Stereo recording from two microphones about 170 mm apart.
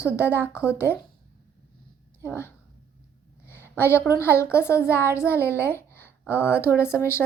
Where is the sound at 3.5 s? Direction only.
15° left (ahead or behind).